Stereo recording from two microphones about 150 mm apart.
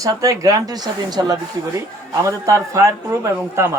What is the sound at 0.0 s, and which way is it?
Speech, 25° right (ahead or behind).